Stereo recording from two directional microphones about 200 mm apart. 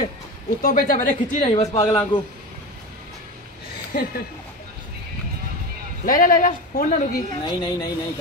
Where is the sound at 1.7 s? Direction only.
25° left (ahead or behind).